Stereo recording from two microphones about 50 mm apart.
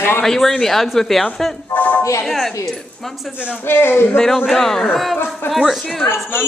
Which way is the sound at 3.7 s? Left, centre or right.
Left.